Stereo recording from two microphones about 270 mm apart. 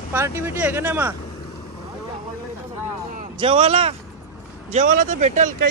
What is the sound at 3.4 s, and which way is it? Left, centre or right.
Speech, centre.